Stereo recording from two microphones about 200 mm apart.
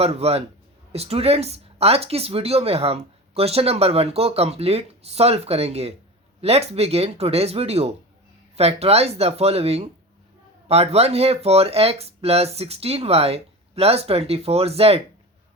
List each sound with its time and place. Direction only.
0.0 s speech: 30° right (ahead or behind)